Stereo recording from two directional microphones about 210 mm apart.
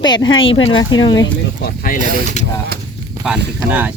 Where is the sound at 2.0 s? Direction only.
40° right (ahead or behind).